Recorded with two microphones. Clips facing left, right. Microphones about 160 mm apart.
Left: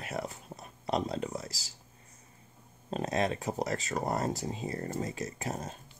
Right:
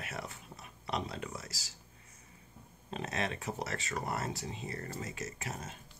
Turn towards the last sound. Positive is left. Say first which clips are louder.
# left 6 dB
turn(degrees=40)  # may be behind; listen again after turning